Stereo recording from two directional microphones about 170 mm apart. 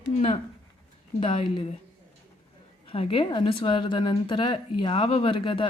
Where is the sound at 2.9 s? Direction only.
35° left (ahead or behind).